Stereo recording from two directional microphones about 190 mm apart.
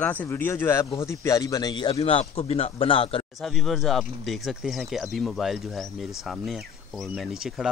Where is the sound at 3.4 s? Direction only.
Centre (ahead or behind).